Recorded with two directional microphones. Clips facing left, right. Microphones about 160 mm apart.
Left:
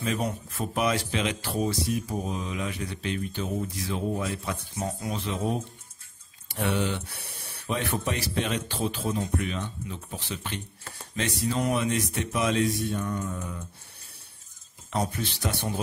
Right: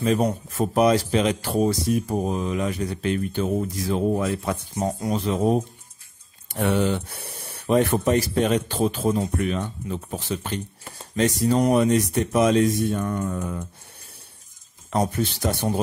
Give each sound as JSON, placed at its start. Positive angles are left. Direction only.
{"t": 0.0, "sound": "speech", "side_deg": -40}
{"t": 4.1, "sound": "speech", "side_deg": -55}
{"t": 4.7, "sound": "speech", "side_deg": -40}
{"t": 14.9, "sound": "speech", "side_deg": -45}